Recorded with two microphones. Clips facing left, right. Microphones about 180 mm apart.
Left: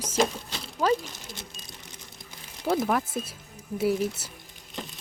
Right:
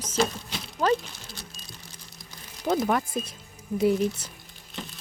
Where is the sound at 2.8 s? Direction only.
5° left (ahead or behind).